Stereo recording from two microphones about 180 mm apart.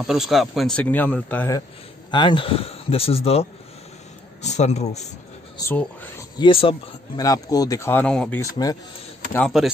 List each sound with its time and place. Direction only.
0.0 s speech: 5° right (ahead or behind)
2.0 s a man's voice: 25° left (ahead or behind)
5.6 s speech: 10° left (ahead or behind)
6.3 s speech: 30° left (ahead or behind)
7.2 s speech: 20° left (ahead or behind)
8.4 s speech: 20° left (ahead or behind)